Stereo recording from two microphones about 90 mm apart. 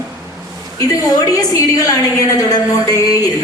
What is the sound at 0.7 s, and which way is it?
A man's voice, 40° left (ahead or behind).